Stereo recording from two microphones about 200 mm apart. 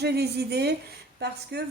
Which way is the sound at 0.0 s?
55° right (ahead or behind).